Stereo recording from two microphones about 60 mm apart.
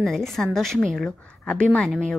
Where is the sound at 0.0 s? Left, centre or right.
Centre.